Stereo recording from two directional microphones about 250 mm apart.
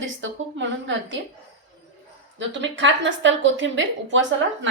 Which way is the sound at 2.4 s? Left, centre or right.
Right.